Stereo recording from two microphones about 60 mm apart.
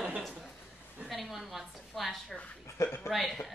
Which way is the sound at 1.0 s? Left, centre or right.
Centre.